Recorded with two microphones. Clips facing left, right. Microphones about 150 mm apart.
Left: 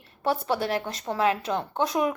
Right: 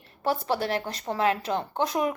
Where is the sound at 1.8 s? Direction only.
20° right (ahead or behind).